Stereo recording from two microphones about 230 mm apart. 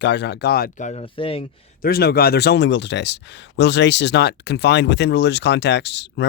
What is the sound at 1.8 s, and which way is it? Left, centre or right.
Speech, left.